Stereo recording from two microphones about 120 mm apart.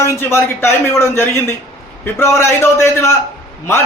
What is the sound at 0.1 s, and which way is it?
A man's voice, 20° left (ahead or behind).